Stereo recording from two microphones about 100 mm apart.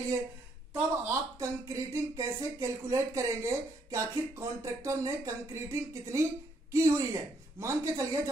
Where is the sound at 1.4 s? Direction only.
30° right (ahead or behind).